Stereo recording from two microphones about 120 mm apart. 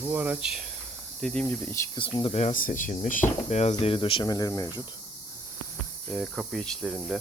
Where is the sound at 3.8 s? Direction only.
50° left (ahead or behind); by 4.8 s 35° left (ahead or behind).